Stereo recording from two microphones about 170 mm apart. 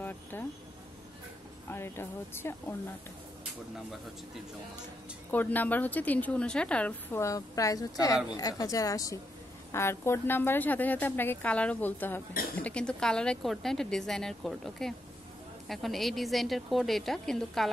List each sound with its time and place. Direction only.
0.0 s a sound: 10° left (ahead or behind)
1.7 s a woman's voice: 15° left (ahead or behind)
5.3 s a woman's voice: 10° left (ahead or behind)